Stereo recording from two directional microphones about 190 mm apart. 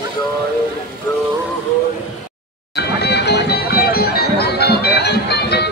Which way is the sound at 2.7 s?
60° left (ahead or behind).